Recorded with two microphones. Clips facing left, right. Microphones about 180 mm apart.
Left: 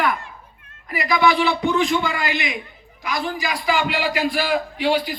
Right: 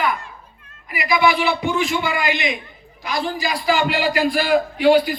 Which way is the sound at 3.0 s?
30° right (ahead or behind).